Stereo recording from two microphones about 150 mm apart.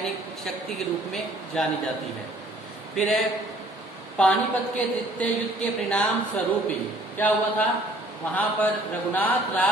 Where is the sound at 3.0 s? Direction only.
Centre (ahead or behind).